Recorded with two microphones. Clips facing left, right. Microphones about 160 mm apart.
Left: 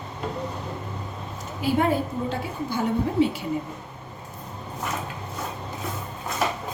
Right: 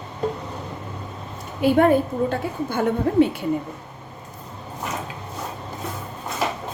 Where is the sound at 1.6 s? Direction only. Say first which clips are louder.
Right 6 dB; 60° right (ahead or behind).